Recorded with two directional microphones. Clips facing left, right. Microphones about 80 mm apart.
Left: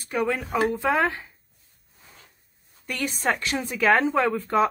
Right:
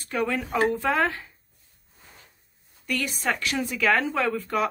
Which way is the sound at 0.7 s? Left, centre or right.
Centre.